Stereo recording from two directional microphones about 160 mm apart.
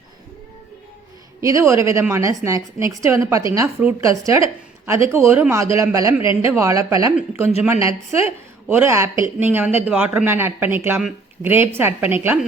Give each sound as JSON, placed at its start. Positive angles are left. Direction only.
{"t": 1.4, "sound": "a woman's voice", "side_deg": -20}
{"t": 7.8, "sound": "a woman's voice", "side_deg": 35}
{"t": 8.7, "sound": "a woman's voice", "side_deg": -15}